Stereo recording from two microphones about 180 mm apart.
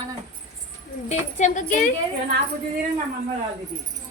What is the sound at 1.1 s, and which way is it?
Speech, 40° left (ahead or behind).